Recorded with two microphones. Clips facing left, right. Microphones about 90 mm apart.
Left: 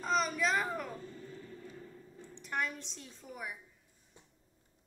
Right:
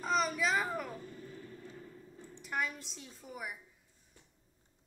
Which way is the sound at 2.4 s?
Centre (ahead or behind).